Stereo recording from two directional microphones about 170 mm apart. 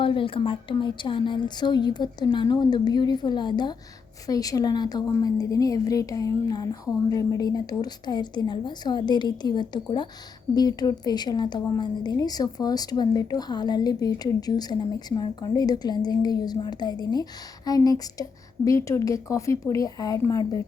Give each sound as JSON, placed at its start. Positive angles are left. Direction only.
{"t": 0.0, "sound": "speech", "side_deg": 30}